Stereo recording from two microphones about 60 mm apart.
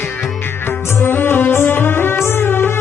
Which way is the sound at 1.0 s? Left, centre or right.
Left.